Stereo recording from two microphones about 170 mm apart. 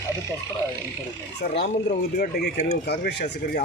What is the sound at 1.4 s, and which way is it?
Speech, 70° left (ahead or behind).